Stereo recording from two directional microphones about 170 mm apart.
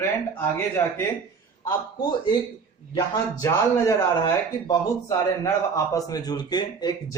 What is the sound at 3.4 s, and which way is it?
A man's voice, 15° left (ahead or behind).